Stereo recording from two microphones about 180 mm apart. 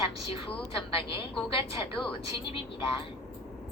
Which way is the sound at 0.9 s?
30° left (ahead or behind).